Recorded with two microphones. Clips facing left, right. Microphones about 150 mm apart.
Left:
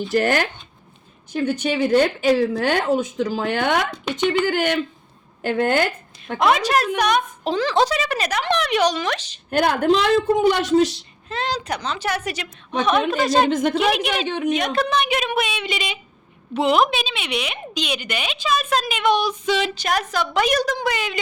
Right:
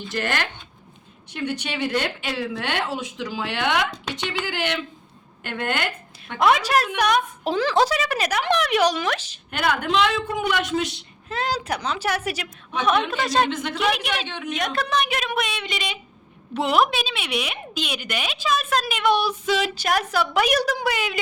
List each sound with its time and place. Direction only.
0.1 s a woman's voice: 45° left (ahead or behind)
6.4 s a woman's voice: 5° right (ahead or behind)
9.5 s a woman's voice: 40° left (ahead or behind)
10.8 s a woman's voice: 5° right (ahead or behind)
13.5 s speech: 45° left (ahead or behind)
13.9 s a woman's voice: centre (ahead or behind)
14.3 s speech: 45° left (ahead or behind)
14.6 s a woman's voice: centre (ahead or behind)